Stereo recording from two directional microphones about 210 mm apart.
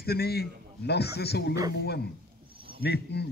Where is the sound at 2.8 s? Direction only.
50° left (ahead or behind).